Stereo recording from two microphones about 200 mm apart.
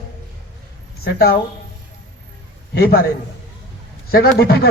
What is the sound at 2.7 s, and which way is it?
Speech, 50° left (ahead or behind).